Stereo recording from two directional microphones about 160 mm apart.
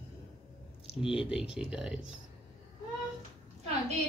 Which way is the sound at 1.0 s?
5° right (ahead or behind).